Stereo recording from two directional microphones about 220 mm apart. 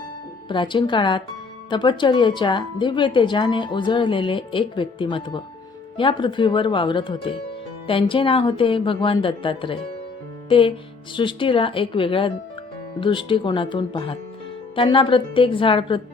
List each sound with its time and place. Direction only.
0.4 s speech: 20° left (ahead or behind)
11.1 s speech: 20° left (ahead or behind)